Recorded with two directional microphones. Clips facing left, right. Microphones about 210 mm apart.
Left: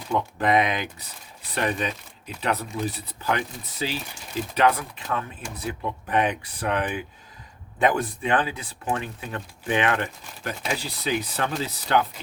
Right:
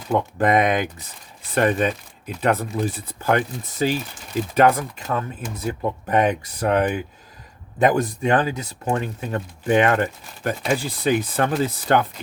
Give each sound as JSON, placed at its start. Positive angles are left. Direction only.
{"t": 0.1, "sound": "speech", "side_deg": -50}